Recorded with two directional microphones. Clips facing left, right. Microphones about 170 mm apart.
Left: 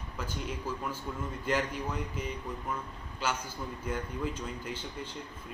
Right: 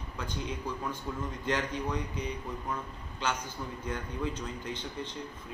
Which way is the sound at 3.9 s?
10° left (ahead or behind).